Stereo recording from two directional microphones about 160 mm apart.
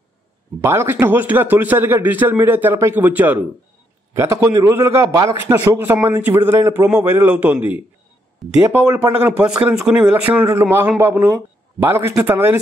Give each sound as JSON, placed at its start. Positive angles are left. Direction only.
{"t": 0.6, "sound": "a man's voice", "side_deg": -15}